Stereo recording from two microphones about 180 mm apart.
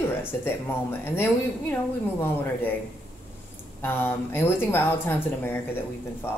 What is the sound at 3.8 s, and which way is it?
Speech, 10° left (ahead or behind).